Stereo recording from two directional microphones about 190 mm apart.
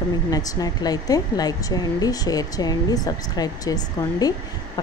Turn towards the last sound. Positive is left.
turn(degrees=20)  # may be behind; listen again after turning